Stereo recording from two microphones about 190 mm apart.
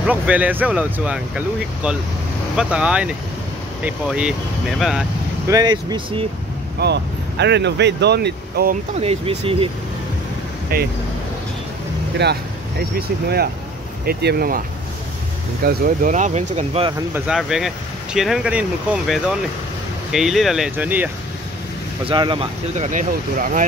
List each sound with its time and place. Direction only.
0.0 s speech: 10° right (ahead or behind)
5.5 s speech: 20° right (ahead or behind)
6.8 s speech: 65° right (ahead or behind)
9.0 s speech: 30° right (ahead or behind)
10.7 s speech: 55° right (ahead or behind)
12.2 s speech: 60° right (ahead or behind)
14.0 s speech: 55° right (ahead or behind)
15.6 s speech: 45° right (ahead or behind)
17.1 s speech: 5° right (ahead or behind)
22.0 s speech: 25° right (ahead or behind)
22.8 s speech: 45° right (ahead or behind)